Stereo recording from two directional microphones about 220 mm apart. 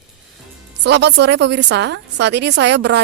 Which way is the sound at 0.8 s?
50° right (ahead or behind).